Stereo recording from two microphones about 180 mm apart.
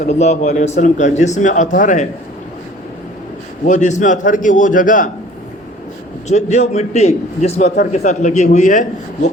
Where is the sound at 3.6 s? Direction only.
40° left (ahead or behind).